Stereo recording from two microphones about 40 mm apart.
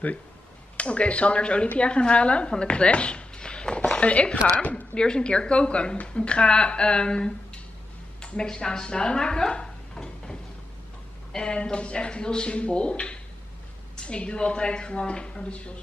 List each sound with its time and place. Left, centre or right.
0.7 s speech: left
2.6 s a sound: left
3.9 s a woman's voice: left
4.9 s speech: left
11.3 s speech: left